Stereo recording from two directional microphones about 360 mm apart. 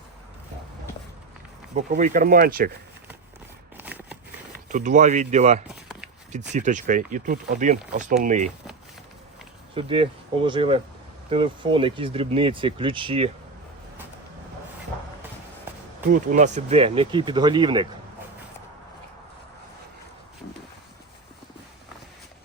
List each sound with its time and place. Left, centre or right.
1.7 s speech: centre
3.8 s a sound: centre
4.7 s speech: centre
9.7 s speech: centre
16.0 s speech: right